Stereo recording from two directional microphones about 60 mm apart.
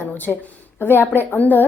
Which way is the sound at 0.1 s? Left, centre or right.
Left.